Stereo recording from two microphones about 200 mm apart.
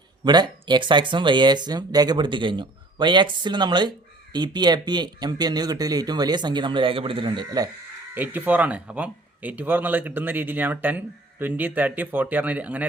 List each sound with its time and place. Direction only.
0.3 s speech: 20° right (ahead or behind)
8.1 s speech: 10° right (ahead or behind)